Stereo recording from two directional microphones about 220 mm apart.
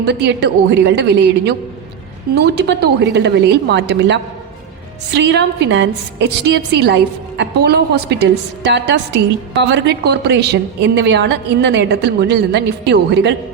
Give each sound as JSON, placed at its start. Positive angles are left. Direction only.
{"t": 0.0, "sound": "a woman's voice", "side_deg": -50}